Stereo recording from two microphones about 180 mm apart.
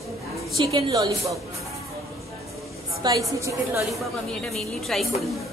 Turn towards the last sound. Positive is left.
turn(degrees=0)  # may be behind; listen again after turning